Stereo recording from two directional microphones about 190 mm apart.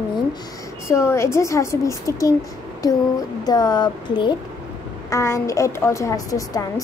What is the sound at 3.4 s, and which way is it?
A woman's voice, 20° left (ahead or behind).